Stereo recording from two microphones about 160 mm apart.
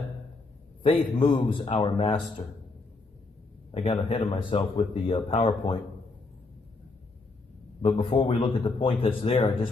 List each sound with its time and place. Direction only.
0.8 s a man's voice: 35° left (ahead or behind)
3.7 s a man's voice: 40° left (ahead or behind)
7.8 s a man's voice: 35° left (ahead or behind)